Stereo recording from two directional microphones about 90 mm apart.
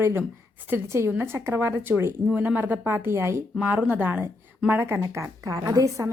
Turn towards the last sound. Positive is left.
turn(degrees=-40)  # may be behind; listen again after turning